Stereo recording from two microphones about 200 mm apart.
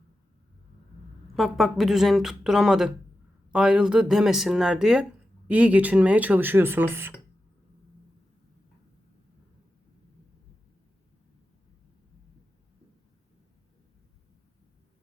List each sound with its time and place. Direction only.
1.4 s speech: centre (ahead or behind)